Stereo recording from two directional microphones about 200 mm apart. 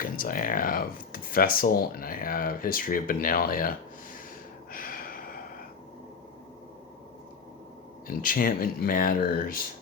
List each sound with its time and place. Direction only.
0.0 s speech: 45° left (ahead or behind)
4.7 s a sound: 45° left (ahead or behind)
8.0 s speech: 45° left (ahead or behind)